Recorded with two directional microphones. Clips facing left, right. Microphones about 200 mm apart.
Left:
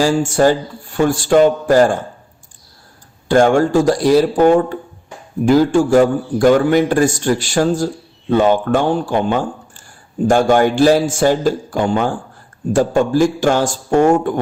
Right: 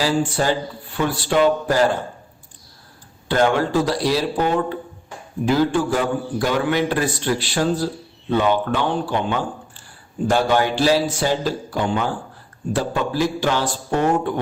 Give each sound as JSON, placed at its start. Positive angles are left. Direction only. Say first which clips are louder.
{"t": 0.0, "sound": "a man's voice", "louder": "left 7 dB", "side_deg": 45}
{"t": 3.2, "sound": "a man's voice", "louder": "left 6 dB", "side_deg": 45}